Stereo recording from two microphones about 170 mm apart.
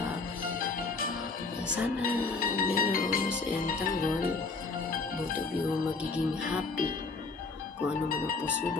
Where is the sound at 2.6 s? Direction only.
55° left (ahead or behind).